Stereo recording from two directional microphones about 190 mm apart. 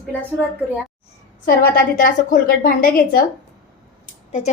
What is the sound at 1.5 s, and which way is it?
A woman's voice, 50° left (ahead or behind).